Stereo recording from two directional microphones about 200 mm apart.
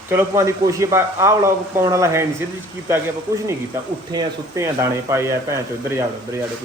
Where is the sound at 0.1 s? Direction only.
15° right (ahead or behind).